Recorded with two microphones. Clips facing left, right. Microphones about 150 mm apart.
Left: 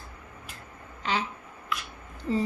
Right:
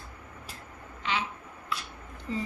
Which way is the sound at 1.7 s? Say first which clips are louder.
Left 2 dB; 30° right (ahead or behind).